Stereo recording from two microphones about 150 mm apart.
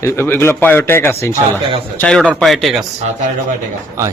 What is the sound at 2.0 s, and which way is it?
Speech, 5° left (ahead or behind).